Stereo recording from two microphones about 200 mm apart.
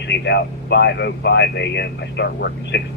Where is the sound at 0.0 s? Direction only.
60° left (ahead or behind).